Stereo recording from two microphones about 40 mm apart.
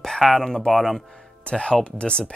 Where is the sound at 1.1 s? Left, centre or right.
Left.